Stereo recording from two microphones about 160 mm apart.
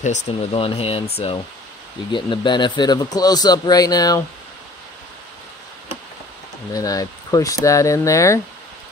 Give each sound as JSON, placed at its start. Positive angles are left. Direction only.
{"t": 0.5, "sound": "a man's voice", "side_deg": 35}
{"t": 6.7, "sound": "a man's voice", "side_deg": 20}